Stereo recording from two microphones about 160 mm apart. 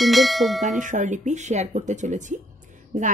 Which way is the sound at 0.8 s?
50° right (ahead or behind).